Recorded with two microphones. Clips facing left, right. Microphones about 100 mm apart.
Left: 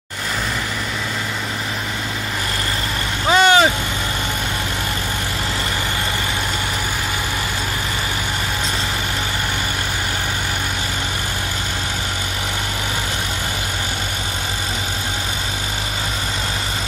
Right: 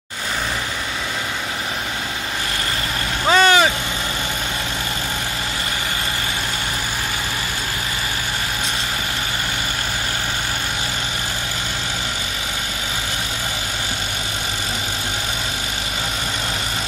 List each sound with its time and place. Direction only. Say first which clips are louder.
3.3 s vehicle: left 1 dB; 20° left (ahead or behind)